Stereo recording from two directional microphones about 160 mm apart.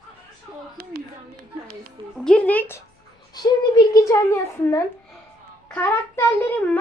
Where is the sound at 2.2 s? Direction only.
5° left (ahead or behind).